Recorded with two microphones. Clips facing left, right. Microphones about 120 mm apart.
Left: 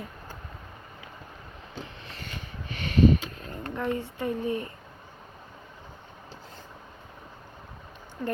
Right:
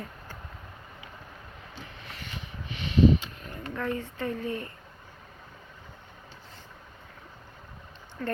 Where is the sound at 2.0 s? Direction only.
30° left (ahead or behind).